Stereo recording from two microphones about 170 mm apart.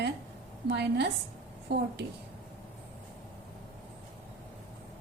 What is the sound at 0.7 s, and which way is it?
Speech, 85° right.